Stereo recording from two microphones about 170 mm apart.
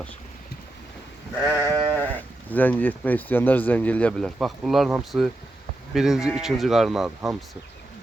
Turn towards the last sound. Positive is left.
turn(degrees=0)  # may be behind; listen again after turning